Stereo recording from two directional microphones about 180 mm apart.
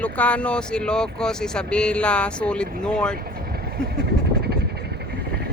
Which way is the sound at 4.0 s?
60° right (ahead or behind).